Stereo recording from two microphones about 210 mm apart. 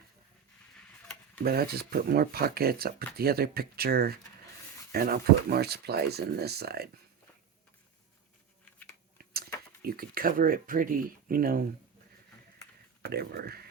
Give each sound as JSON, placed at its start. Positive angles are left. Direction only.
{"t": 1.5, "sound": "speech", "side_deg": -45}
{"t": 9.8, "sound": "speech", "side_deg": -45}
{"t": 13.1, "sound": "speech", "side_deg": -50}